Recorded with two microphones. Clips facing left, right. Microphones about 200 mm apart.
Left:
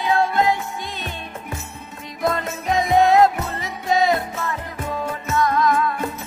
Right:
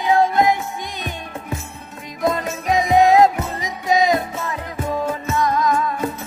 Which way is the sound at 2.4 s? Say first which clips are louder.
Right 2 dB; 15° right (ahead or behind).